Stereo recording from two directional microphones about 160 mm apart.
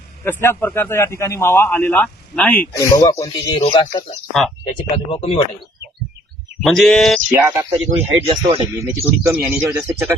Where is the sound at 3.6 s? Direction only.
35° left (ahead or behind).